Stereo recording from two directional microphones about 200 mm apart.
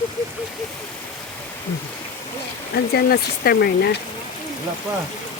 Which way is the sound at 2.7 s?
50° left (ahead or behind).